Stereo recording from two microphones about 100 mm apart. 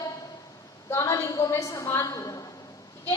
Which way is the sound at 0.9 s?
25° left (ahead or behind).